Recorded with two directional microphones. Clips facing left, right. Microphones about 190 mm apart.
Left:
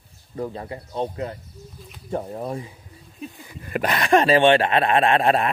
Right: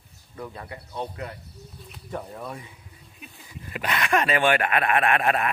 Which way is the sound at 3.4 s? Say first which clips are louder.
Left 6 dB; 55° left (ahead or behind).